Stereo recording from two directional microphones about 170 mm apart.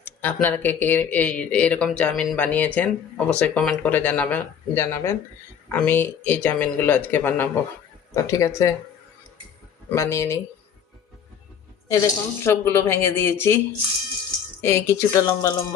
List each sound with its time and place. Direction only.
0.0 s a sound: 10° left (ahead or behind)
0.4 s speech: 10° left (ahead or behind)
9.9 s speech: 15° left (ahead or behind)
11.9 s speech: 15° left (ahead or behind)
14.6 s speech: 15° left (ahead or behind)